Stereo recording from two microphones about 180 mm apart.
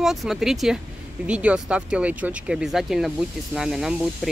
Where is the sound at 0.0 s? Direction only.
Centre (ahead or behind).